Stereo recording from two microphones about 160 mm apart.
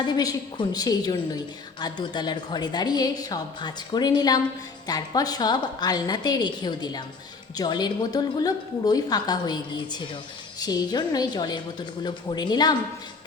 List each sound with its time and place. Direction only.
0.1 s a woman's voice: 25° left (ahead or behind)